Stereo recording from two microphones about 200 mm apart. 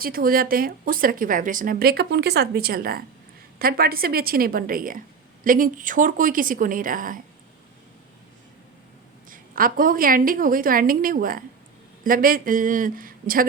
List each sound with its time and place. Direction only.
0.0 s speech: 45° right (ahead or behind)
9.3 s speech: 45° right (ahead or behind)